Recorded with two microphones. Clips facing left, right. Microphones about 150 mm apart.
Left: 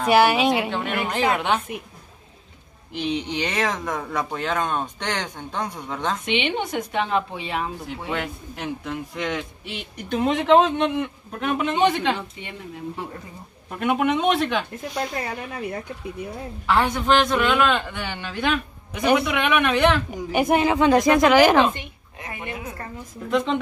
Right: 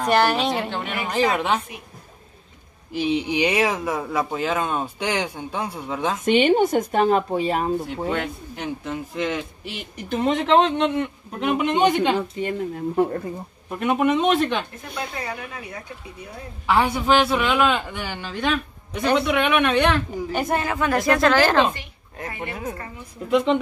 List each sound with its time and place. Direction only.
0.0 s a man's voice: 5° left (ahead or behind)
2.9 s speech: 5° right (ahead or behind)
6.2 s speech: 45° right (ahead or behind)
8.1 s a man's voice: centre (ahead or behind)
11.4 s speech: 10° right (ahead or behind)
12.2 s speech: 45° right (ahead or behind)
13.7 s a man's voice: centre (ahead or behind)
16.6 s a man's voice: 10° right (ahead or behind)
20.1 s speech: 15° left (ahead or behind)
22.4 s a woman's voice: 35° right (ahead or behind)
23.3 s a man's voice: 5° right (ahead or behind)